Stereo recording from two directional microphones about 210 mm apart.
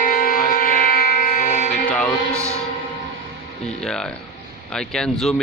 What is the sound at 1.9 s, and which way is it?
Music, 5° left (ahead or behind).